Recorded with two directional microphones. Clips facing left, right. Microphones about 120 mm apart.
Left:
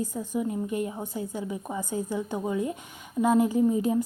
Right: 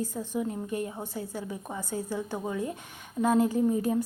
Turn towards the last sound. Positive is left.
turn(degrees=15)  # may be behind; listen again after turning